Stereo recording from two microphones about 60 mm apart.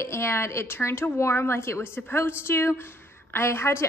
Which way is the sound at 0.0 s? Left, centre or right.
Left.